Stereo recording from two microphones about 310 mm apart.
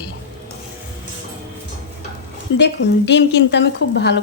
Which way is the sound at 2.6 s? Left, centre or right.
Left.